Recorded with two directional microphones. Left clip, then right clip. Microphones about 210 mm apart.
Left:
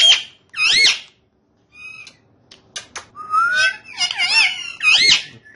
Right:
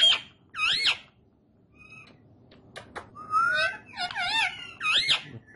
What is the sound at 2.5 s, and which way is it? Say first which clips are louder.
Finger snapping: left 10 dB; 15° right (ahead or behind).